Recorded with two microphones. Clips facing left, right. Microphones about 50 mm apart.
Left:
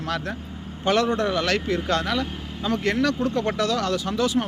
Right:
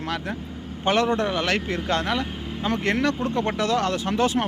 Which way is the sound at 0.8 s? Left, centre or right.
Right.